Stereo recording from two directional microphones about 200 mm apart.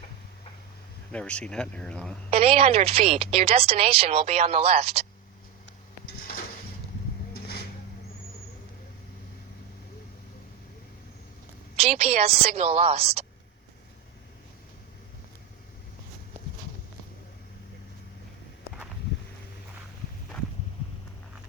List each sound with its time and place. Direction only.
1.1 s speech: 5° left (ahead or behind)
2.3 s a woman's voice: 30° right (ahead or behind)
6.1 s dishes: 45° left (ahead or behind)
7.3 s vehicle: 50° left (ahead or behind)
11.8 s a woman's voice: 30° right (ahead or behind)